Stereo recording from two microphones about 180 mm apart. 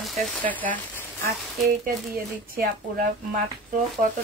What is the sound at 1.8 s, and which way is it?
Speech, 50° right (ahead or behind).